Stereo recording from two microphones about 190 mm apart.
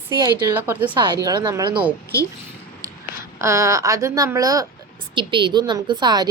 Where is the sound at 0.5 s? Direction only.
10° right (ahead or behind).